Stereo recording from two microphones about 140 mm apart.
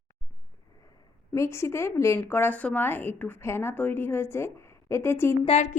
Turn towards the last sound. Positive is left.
turn(degrees=50)  # may be behind; listen again after turning